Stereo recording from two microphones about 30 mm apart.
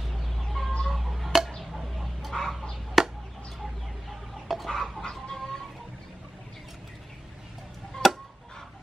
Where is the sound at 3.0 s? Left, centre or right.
Centre.